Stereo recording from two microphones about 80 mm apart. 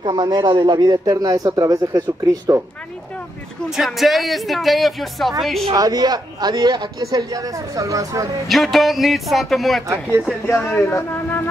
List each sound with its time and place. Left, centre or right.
0.0 s a man's voice: right
3.7 s speech: centre
5.8 s a man's voice: right
8.5 s speech: centre
10.4 s speech: left